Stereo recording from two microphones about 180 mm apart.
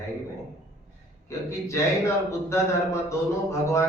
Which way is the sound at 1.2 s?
15° left (ahead or behind).